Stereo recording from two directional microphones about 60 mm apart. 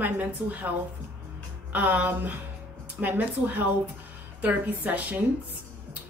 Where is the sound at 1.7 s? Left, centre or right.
Right.